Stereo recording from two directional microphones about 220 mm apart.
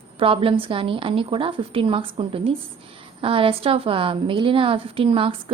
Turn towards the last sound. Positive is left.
turn(degrees=-25)  # may be behind; listen again after turning